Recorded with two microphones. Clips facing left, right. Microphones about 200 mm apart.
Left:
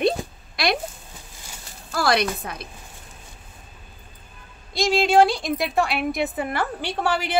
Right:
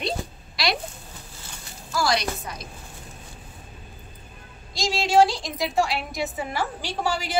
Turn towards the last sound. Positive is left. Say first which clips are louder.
# left 3 dB
turn(degrees=60)  # may be behind; listen again after turning